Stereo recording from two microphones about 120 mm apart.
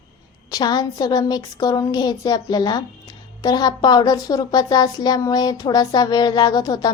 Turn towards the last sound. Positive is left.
turn(degrees=30)  # may be behind; listen again after turning